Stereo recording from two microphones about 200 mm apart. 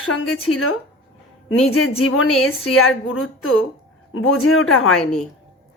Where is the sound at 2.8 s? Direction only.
90° left.